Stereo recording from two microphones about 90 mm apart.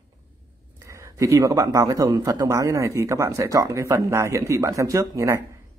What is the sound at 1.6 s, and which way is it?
A man's voice, 40° right (ahead or behind).